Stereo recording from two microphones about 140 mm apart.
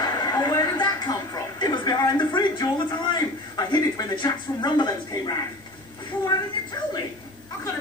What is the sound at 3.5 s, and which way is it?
Speech, 35° left (ahead or behind).